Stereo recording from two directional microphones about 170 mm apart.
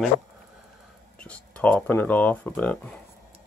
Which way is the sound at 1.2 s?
5° left (ahead or behind).